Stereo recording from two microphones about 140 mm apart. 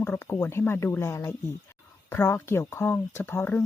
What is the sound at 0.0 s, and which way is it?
Speech, 20° left (ahead or behind).